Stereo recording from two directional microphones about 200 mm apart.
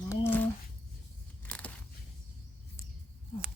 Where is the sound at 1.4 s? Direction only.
5° left (ahead or behind).